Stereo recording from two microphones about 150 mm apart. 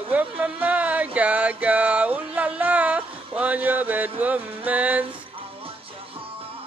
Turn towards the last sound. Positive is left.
turn(degrees=-10)  # may be behind; listen again after turning